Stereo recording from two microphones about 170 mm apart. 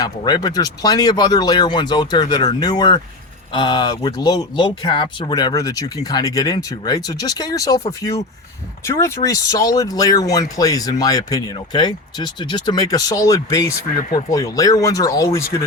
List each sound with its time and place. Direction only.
0.0 s speech: 25° left (ahead or behind)